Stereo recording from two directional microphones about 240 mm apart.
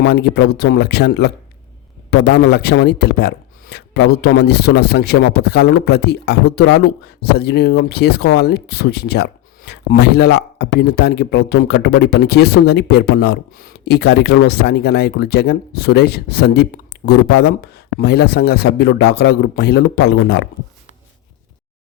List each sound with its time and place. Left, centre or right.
0.0 s a man's voice: left